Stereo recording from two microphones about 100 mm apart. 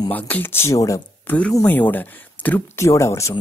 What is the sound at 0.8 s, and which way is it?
Speech, 35° left (ahead or behind).